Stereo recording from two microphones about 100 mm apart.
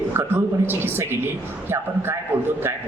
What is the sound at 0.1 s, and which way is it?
Speech, 25° right (ahead or behind).